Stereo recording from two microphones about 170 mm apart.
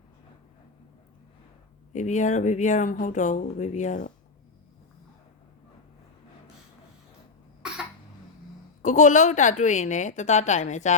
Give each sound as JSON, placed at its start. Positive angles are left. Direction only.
{"t": 1.9, "sound": "speech", "side_deg": 45}
{"t": 7.6, "sound": "cough", "side_deg": -5}
{"t": 8.8, "sound": "speech", "side_deg": 45}